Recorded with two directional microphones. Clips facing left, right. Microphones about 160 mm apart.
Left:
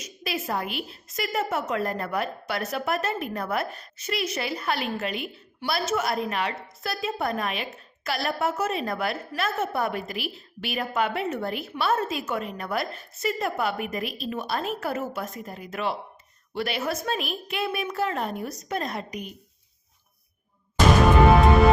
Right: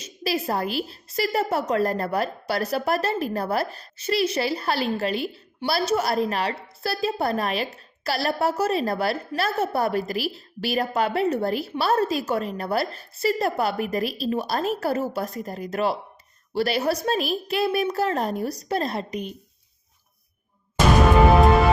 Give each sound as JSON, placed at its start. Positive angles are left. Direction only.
{"t": 0.0, "sound": "a woman's voice", "side_deg": -35}